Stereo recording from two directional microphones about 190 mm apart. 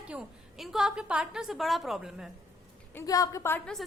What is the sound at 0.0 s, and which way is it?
A woman's voice, 5° right (ahead or behind).